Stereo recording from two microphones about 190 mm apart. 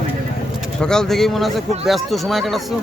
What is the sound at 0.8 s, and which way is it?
Speech, 5° left (ahead or behind).